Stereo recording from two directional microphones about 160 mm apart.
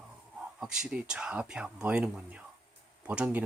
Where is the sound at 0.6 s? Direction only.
5° right (ahead or behind).